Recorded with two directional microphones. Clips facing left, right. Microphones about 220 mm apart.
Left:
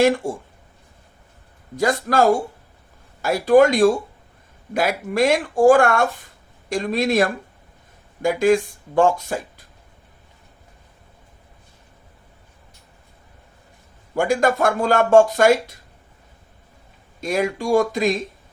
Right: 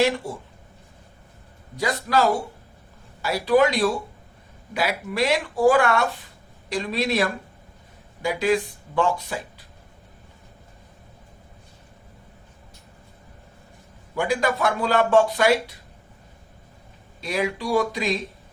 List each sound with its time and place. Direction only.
0.0 s speech: 50° left (ahead or behind)
1.7 s speech: 50° left (ahead or behind)
14.2 s speech: 45° left (ahead or behind)
17.2 s speech: 45° left (ahead or behind)